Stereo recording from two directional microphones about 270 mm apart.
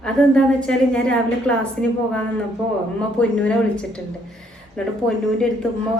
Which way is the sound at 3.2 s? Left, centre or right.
Centre.